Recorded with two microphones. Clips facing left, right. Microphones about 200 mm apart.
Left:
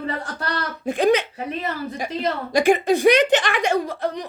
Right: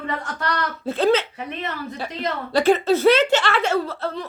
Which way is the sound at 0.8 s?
15° left (ahead or behind).